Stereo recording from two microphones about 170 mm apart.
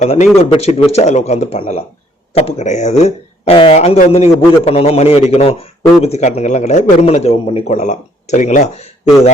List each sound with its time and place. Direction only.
0.0 s a man's voice: 45° left (ahead or behind)